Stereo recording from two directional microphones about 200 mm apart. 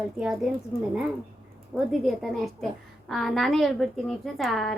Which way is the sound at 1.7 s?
Centre (ahead or behind).